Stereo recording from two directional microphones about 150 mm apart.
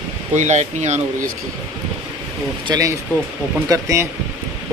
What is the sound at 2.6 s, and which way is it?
Speech, 25° right (ahead or behind).